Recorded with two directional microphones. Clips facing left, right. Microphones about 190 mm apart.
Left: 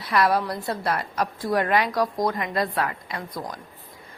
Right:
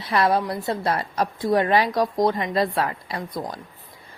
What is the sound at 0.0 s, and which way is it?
A woman's voice, 25° right (ahead or behind).